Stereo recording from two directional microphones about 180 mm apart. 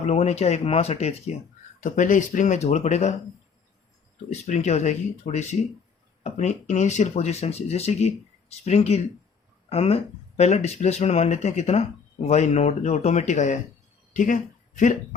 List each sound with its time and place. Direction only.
0.0 s speech: 35° left (ahead or behind)
4.3 s speech: 40° left (ahead or behind)